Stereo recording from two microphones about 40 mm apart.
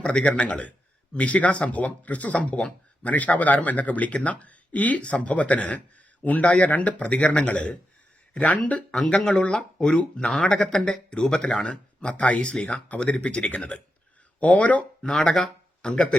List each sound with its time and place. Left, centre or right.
0.0 s speech: left
9.0 s speech: left
15.0 s speech: centre